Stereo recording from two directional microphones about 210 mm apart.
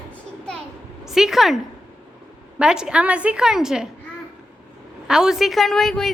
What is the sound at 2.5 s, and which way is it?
A woman's voice, 5° right (ahead or behind).